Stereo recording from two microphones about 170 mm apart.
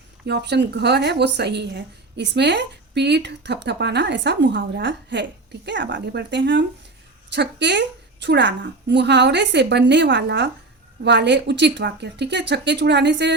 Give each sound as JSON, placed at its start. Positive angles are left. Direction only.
{"t": 0.3, "sound": "a woman's voice", "side_deg": -85}